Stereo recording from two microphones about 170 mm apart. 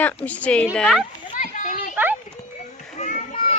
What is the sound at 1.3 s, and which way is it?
Children playing, 50° left (ahead or behind).